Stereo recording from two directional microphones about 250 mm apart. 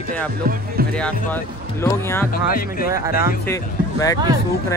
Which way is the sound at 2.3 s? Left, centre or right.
Left.